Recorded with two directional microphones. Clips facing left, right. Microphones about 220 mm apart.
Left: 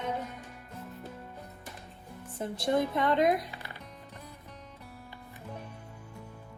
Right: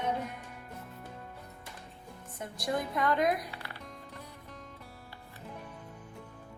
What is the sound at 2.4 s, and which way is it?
A woman's voice, 25° left (ahead or behind).